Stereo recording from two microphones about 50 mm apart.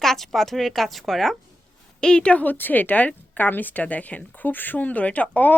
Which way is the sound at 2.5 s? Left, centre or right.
Left.